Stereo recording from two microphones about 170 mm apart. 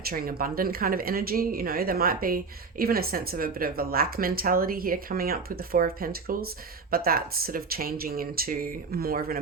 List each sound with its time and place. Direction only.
0.1 s speech: 60° right (ahead or behind)